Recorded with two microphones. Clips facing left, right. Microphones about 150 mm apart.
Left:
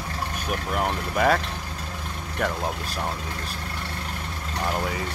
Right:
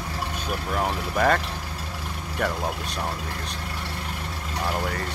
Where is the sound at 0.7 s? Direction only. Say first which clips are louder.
Even; centre (ahead or behind).